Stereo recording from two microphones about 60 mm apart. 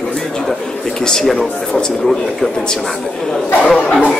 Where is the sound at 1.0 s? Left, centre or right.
Centre.